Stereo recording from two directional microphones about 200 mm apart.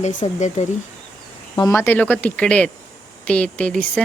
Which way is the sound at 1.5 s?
15° left (ahead or behind).